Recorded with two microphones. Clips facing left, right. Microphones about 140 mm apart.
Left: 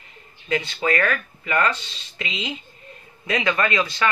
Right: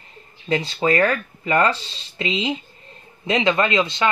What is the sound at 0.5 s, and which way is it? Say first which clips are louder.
Speech: right 3 dB; 30° right (ahead or behind).